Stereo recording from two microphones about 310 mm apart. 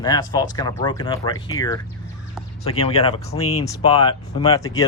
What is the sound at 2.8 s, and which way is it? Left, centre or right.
Speech, centre.